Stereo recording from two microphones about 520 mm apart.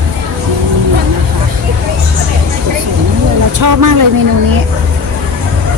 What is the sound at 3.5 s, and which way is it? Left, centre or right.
Vehicle, right.